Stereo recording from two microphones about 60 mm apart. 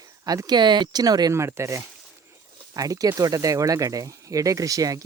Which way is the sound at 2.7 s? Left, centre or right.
Right.